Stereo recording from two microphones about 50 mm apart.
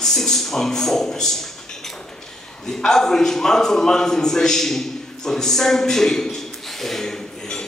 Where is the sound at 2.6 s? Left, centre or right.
Centre.